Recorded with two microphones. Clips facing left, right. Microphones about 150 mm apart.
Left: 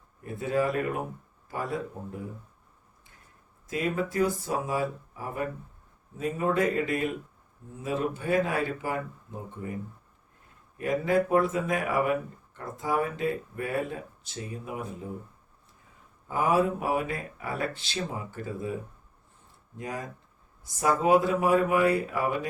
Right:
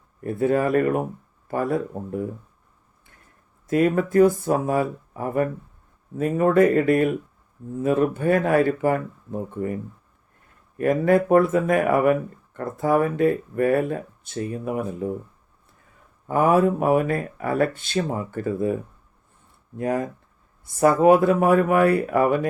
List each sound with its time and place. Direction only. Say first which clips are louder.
0.2 s speech: right 7 dB; 55° right (ahead or behind)
3.7 s speech: right 10 dB; 55° right (ahead or behind)
10.8 s speech: right 7 dB; 55° right (ahead or behind)
16.2 s speech: right 7 dB; 55° right (ahead or behind)